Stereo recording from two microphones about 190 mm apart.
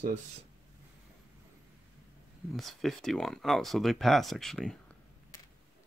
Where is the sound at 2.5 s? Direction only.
Centre (ahead or behind).